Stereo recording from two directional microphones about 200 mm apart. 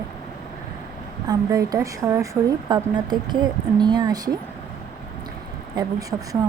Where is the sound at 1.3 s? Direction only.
15° right (ahead or behind).